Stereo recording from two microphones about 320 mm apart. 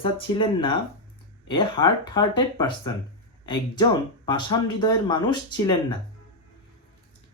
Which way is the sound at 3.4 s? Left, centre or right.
Centre.